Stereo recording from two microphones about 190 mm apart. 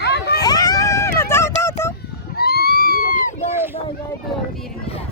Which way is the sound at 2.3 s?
55° left (ahead or behind).